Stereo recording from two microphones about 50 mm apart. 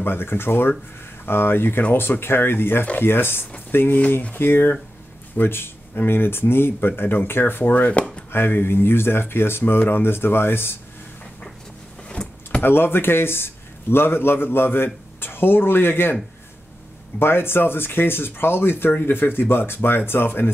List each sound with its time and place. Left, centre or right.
0.0 s a man's voice: left
7.6 s speech: left
8.3 s a man's voice: left
12.2 s power windows: centre
12.6 s a man's voice: left
17.2 s a man's voice: left